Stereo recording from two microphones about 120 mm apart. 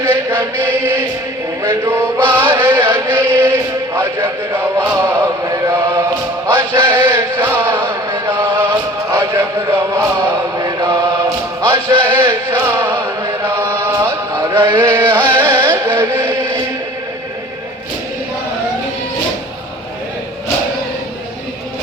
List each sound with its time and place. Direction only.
0.0 s chant: 20° right (ahead or behind)
14.8 s music: 20° right (ahead or behind)